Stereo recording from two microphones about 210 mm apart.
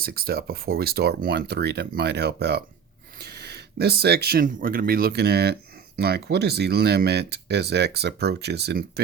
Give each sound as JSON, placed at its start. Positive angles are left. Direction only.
{"t": 0.0, "sound": "speech", "side_deg": -45}